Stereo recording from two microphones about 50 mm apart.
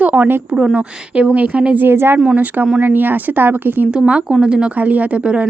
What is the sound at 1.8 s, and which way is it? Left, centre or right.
Speech, right.